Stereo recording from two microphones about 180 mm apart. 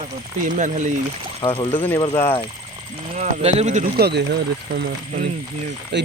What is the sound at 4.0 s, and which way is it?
Speech, 65° right (ahead or behind).